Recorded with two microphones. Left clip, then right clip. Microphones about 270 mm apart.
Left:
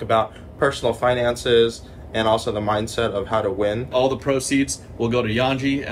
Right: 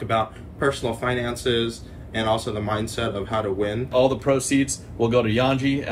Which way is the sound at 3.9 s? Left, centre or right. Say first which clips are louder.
Right 3 dB; centre.